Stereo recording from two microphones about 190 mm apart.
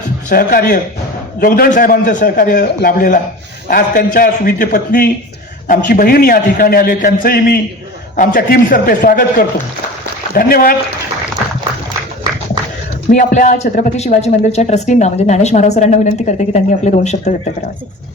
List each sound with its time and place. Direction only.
0.3 s a man's voice: 50° left (ahead or behind)
13.1 s speech: 45° left (ahead or behind)